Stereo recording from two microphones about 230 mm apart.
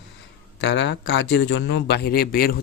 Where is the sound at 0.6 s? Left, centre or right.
Left.